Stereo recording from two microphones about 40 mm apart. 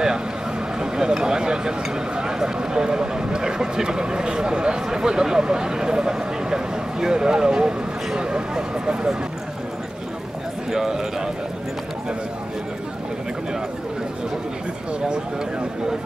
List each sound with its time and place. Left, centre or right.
0.7 s speech: centre
10.7 s speech: centre